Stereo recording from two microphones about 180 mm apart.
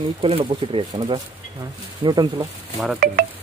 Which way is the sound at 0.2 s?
30° right (ahead or behind).